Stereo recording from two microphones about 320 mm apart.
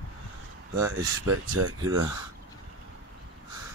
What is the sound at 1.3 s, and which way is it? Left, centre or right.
Speech, right.